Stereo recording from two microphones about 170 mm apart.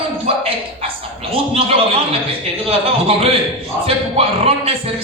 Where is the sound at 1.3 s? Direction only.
35° right (ahead or behind).